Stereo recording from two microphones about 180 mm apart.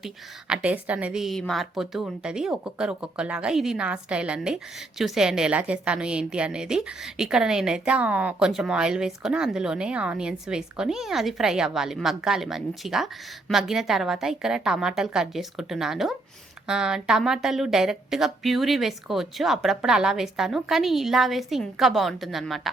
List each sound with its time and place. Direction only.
0.0 s a woman's voice: 5° right (ahead or behind)